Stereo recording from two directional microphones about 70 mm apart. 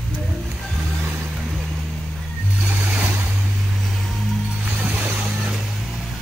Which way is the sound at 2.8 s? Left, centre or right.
Right.